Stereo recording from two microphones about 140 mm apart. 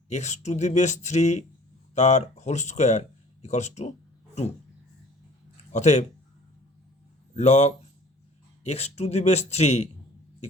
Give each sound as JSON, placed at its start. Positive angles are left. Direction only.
{"t": 0.1, "sound": "speech", "side_deg": 55}
{"t": 5.7, "sound": "a man's voice", "side_deg": 55}
{"t": 7.3, "sound": "a man's voice", "side_deg": 55}